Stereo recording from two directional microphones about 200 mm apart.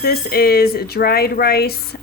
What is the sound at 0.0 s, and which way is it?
Speech, 50° left (ahead or behind).